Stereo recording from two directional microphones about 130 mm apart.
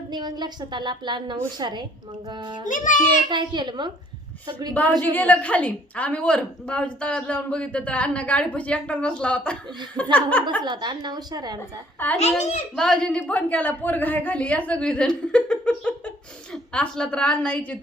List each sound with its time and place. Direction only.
0.1 s a woman's voice: 35° right (ahead or behind)
2.6 s a child's voice: 85° left
3.2 s a woman's voice: 35° right (ahead or behind)
4.7 s speech: 15° left (ahead or behind)
10.6 s a woman's voice: 35° right (ahead or behind)
12.2 s a child's voice: 60° left (ahead or behind)
12.7 s speech: 5° left (ahead or behind)